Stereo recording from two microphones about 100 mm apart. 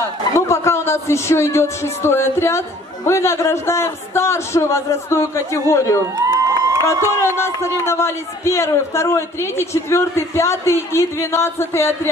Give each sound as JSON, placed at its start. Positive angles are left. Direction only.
{"t": 0.0, "sound": "a man's voice", "side_deg": 25}
{"t": 6.1, "sound": "a sound", "side_deg": -35}
{"t": 7.0, "sound": "a man's voice", "side_deg": 25}